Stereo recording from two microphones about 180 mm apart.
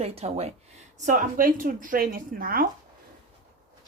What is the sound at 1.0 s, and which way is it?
A woman's voice, 45° right (ahead or behind).